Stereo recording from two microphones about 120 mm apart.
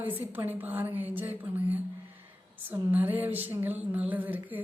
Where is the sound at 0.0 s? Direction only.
15° right (ahead or behind).